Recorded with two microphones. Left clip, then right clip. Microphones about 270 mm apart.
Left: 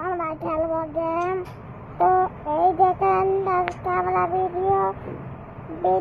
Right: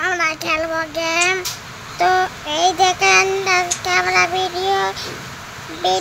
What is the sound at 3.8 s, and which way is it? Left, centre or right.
Child singing, right.